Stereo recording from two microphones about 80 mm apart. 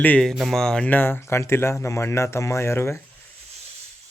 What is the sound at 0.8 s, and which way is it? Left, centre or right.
Speech, left.